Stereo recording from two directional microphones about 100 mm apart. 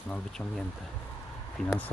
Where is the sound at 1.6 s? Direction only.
5° left (ahead or behind).